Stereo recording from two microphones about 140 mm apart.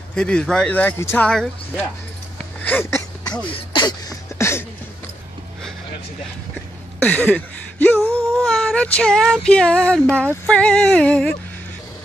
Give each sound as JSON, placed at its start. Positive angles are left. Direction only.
{"t": 0.1, "sound": "speech", "side_deg": 5}
{"t": 1.2, "sound": "child singing", "side_deg": 5}
{"t": 2.6, "sound": "speech", "side_deg": 15}
{"t": 3.4, "sound": "a sound", "side_deg": 35}
{"t": 4.4, "sound": "a sound", "side_deg": 20}
{"t": 7.0, "sound": "speech", "side_deg": 10}
{"t": 8.3, "sound": "child singing", "side_deg": 5}
{"t": 10.4, "sound": "speech", "side_deg": 5}